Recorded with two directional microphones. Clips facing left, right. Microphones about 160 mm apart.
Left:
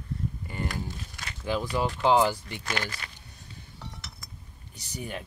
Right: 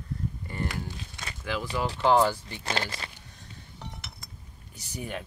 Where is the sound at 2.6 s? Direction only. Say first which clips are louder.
Right 2 dB; 30° right (ahead or behind).